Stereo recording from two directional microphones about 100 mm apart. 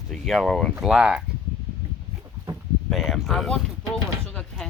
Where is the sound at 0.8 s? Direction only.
10° right (ahead or behind).